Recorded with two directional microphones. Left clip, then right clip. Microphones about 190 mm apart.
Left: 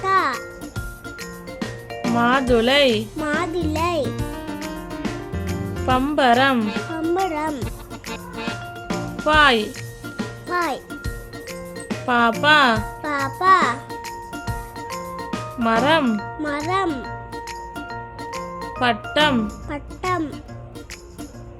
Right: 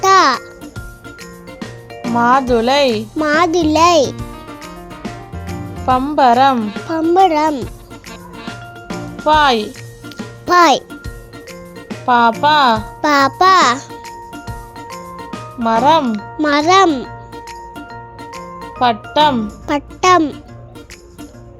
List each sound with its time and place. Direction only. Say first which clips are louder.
0.0 s music: right 9 dB; 30° right (ahead or behind)
1.2 s music: even; centre (ahead or behind)
3.2 s a child's voice: right 10 dB; 35° right (ahead or behind)
4.2 s music: left 1 dB; centre (ahead or behind)
7.3 s speech: right 10 dB; 30° right (ahead or behind)
8.1 s music: left 2 dB; centre (ahead or behind)
10.5 s a child's voice: right 14 dB; 40° right (ahead or behind)
11.9 s speech: right 7 dB; centre (ahead or behind)
13.0 s a child's voice: right 11 dB; 40° right (ahead or behind)
13.9 s music: right 1 dB; centre (ahead or behind)
16.4 s a child's voice: right 13 dB; 35° right (ahead or behind)
17.0 s music: right 2 dB; centre (ahead or behind)
19.6 s speech: right 13 dB; 40° right (ahead or behind)